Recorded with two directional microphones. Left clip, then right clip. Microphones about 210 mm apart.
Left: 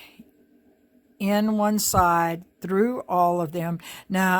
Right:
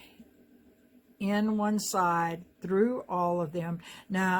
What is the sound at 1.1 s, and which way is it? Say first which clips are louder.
Speech: left 7 dB; 55° left (ahead or behind).